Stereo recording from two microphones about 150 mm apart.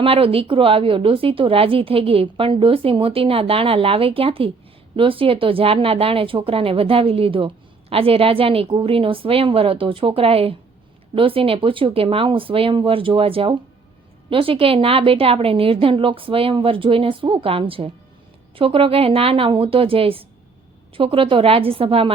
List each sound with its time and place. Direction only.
0.0 s speech: 40° right (ahead or behind)